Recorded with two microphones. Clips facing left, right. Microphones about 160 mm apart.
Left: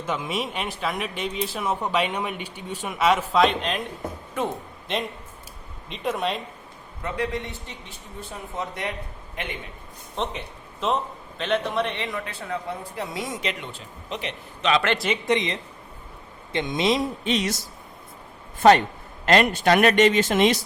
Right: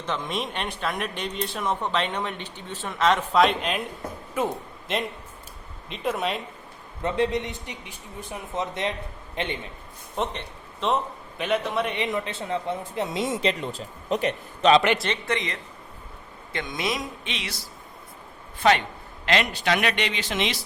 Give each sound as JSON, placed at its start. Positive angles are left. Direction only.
{"t": 0.0, "sound": "a man's voice", "side_deg": 10}
{"t": 4.9, "sound": "speech", "side_deg": 0}
{"t": 7.0, "sound": "a man's voice", "side_deg": -25}
{"t": 10.2, "sound": "a man's voice", "side_deg": 0}
{"t": 11.9, "sound": "speech", "side_deg": -20}
{"t": 14.9, "sound": "speech", "side_deg": 5}
{"t": 15.3, "sound": "a man's voice", "side_deg": 20}
{"t": 17.2, "sound": "a man's voice", "side_deg": 40}